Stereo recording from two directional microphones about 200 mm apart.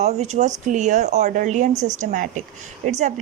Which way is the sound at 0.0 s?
35° right (ahead or behind).